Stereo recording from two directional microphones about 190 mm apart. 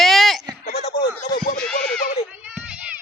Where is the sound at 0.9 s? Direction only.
60° left (ahead or behind).